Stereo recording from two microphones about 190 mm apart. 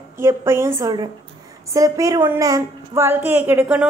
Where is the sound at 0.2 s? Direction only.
15° right (ahead or behind).